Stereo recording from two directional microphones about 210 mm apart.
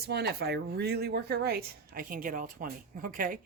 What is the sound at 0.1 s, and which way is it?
Speech, 50° right (ahead or behind).